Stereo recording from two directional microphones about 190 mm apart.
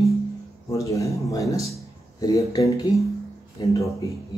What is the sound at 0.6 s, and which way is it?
Speech, 15° left (ahead or behind).